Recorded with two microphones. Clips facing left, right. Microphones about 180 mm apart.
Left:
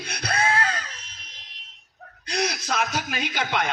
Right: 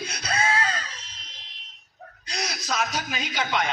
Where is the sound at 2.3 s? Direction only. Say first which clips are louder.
Left 4 dB; 55° left (ahead or behind).